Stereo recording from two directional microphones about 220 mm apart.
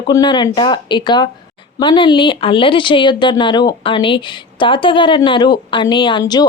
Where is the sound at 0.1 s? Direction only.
20° left (ahead or behind).